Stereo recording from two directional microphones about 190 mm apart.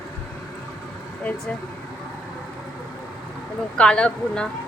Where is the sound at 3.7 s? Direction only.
5° left (ahead or behind).